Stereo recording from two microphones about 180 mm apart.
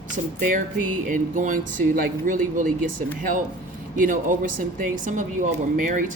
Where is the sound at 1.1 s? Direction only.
45° right (ahead or behind).